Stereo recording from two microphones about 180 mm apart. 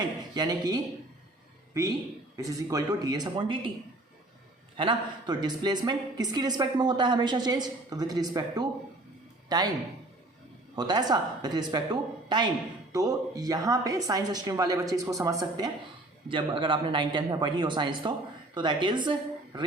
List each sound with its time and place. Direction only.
0.2 s a woman's voice: 20° right (ahead or behind)
4.8 s speech: 25° right (ahead or behind)
10.8 s speech: 25° right (ahead or behind)